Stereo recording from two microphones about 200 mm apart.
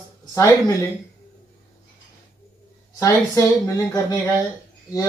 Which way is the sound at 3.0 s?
15° left (ahead or behind).